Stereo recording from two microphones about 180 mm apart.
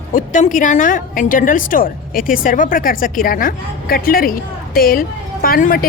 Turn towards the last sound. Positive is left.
turn(degrees=50)  # may be behind; listen again after turning